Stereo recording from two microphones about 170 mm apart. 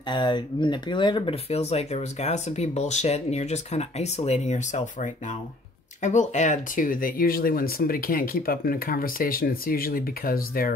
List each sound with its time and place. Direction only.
0.1 s speech: 30° left (ahead or behind); by 10.7 s 60° left (ahead or behind)